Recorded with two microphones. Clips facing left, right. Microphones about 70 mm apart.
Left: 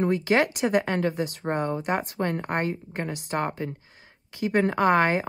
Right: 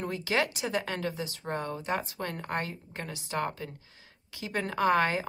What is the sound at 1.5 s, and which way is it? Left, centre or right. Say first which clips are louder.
Speech: left 7 dB; left.